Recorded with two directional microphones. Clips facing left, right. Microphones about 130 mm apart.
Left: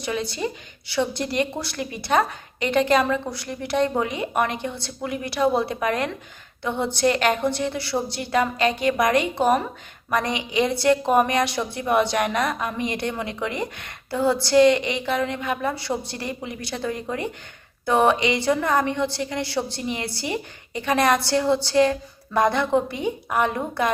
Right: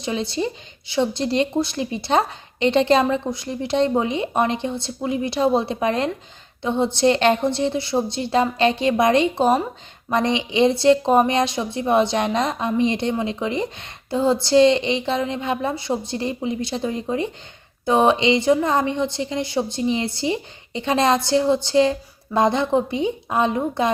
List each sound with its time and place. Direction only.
0.0 s a woman's voice: 25° right (ahead or behind)